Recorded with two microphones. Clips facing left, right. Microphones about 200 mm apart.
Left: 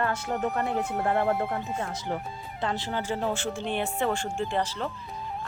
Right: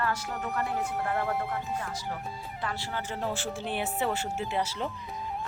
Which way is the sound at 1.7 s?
25° left (ahead or behind).